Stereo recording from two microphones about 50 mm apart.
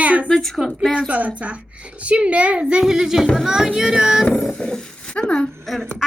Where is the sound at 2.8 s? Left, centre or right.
Centre.